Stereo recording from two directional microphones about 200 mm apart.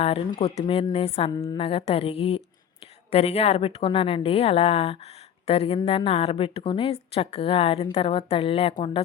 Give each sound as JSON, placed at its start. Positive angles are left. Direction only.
{"t": 0.0, "sound": "a woman's voice", "side_deg": 30}
{"t": 1.3, "sound": "a woman's voice", "side_deg": 20}